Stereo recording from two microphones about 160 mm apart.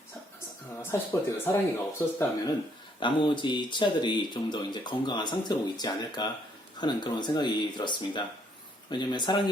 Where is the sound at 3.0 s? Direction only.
30° left (ahead or behind).